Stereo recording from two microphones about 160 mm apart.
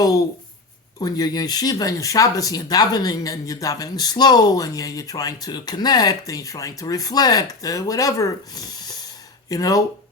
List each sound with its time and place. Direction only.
0.0 s speech: 20° left (ahead or behind)